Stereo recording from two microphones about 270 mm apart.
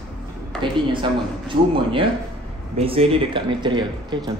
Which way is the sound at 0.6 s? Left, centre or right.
Centre.